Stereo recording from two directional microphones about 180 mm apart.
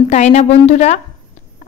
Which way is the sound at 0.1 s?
40° left (ahead or behind).